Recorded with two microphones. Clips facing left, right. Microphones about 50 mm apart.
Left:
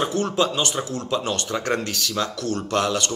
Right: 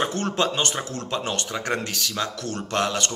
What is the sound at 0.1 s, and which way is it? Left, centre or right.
Speech, right.